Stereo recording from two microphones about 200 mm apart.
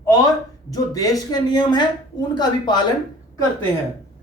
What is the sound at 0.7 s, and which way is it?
Speech, 20° left (ahead or behind).